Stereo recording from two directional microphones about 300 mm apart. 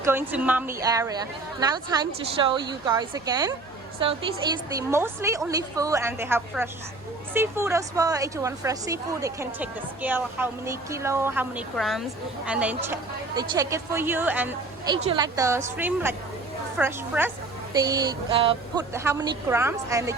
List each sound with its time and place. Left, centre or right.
0.0 s a woman's voice: centre